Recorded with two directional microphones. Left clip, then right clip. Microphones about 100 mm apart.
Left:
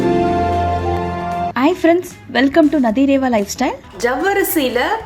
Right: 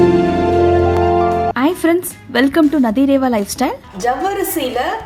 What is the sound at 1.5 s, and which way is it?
Speech, 20° right (ahead or behind).